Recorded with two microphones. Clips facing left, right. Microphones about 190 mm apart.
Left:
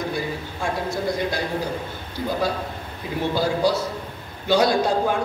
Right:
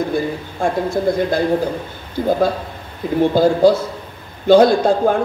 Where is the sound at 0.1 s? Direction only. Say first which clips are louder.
Right 7 dB; 55° right (ahead or behind).